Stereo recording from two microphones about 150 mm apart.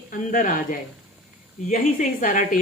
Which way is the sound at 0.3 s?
60° left (ahead or behind).